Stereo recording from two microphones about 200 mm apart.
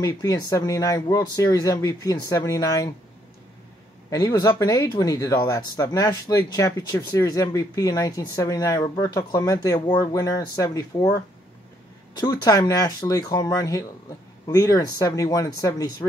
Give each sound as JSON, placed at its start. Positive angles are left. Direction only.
{"t": 0.0, "sound": "speech", "side_deg": 15}
{"t": 4.1, "sound": "speech", "side_deg": 20}
{"t": 12.2, "sound": "speech", "side_deg": 20}